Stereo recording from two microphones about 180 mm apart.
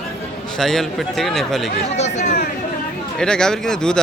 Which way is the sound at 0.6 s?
Centre (ahead or behind).